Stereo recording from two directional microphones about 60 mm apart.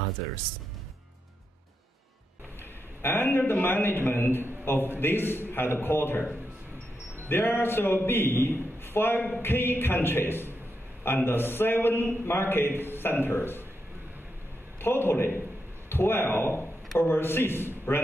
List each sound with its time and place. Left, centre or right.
3.0 s a man's voice: left
7.2 s a man's voice: left
14.8 s a man's voice: left